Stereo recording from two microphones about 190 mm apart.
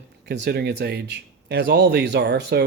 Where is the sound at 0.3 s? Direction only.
60° right (ahead or behind).